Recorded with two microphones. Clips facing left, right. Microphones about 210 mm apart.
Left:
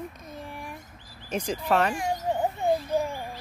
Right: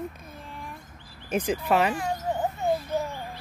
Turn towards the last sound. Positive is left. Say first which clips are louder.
# left 2 dB
turn(degrees=10)  # may be behind; listen again after turning